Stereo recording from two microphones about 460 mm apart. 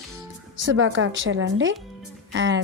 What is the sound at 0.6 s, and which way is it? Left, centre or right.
Speech, right.